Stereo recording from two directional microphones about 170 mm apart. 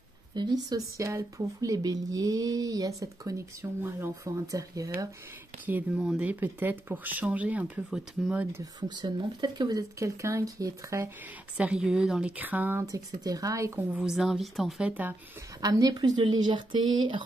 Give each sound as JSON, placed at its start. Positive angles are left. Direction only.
{"t": 0.3, "sound": "speech", "side_deg": -25}
{"t": 5.7, "sound": "speech", "side_deg": -10}
{"t": 8.8, "sound": "speech", "side_deg": -25}
{"t": 11.5, "sound": "speech", "side_deg": -5}
{"t": 15.6, "sound": "speech", "side_deg": -20}